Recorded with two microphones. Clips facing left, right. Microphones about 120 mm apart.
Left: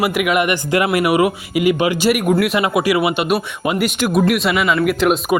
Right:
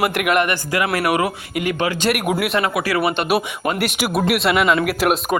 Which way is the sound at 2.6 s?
15° left (ahead or behind).